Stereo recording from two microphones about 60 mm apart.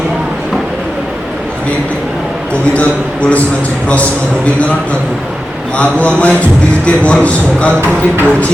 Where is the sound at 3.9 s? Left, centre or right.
Left.